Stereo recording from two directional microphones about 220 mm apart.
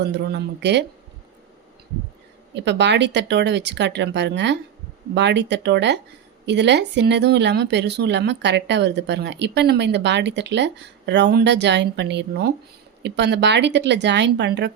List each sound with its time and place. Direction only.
0.0 s speech: 50° right (ahead or behind)
2.6 s speech: 50° right (ahead or behind)